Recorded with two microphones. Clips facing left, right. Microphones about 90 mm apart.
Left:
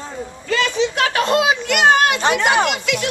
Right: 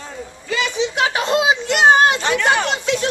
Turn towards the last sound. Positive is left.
turn(degrees=-30)  # may be behind; listen again after turning